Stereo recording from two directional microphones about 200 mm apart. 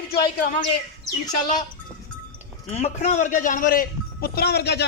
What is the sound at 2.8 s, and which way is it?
A man's voice, 35° left (ahead or behind).